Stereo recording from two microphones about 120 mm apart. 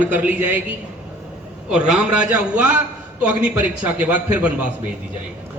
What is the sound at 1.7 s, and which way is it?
A man's voice, 5° right (ahead or behind).